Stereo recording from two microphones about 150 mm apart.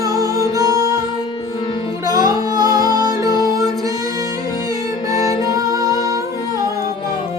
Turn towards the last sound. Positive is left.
turn(degrees=-25)  # may be behind; listen again after turning